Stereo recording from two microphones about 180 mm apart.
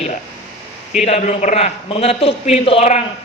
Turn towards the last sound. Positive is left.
turn(degrees=35)  # may be behind; listen again after turning